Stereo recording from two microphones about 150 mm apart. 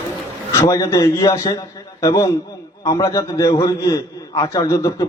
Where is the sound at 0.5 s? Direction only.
25° left (ahead or behind).